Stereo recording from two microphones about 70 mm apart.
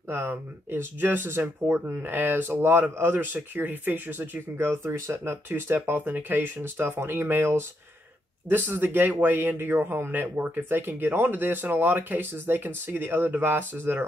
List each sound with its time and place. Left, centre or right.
0.1 s speech: right